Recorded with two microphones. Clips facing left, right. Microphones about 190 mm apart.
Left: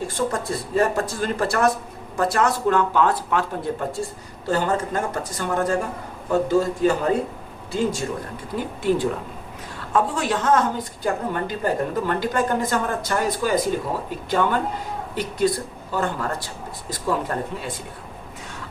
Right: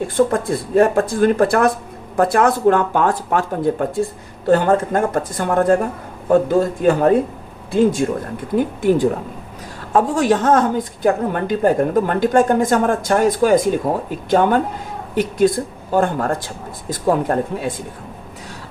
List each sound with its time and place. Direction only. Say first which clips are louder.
0.2 s a woman's voice: right 9 dB; 55° right (ahead or behind)
8.5 s a woman's voice: right 6 dB; 50° right (ahead or behind)